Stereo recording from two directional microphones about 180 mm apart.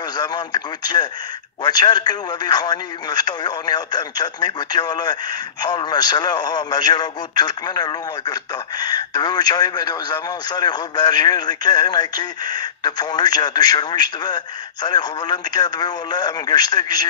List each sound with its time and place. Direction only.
0.1 s speech: 25° left (ahead or behind)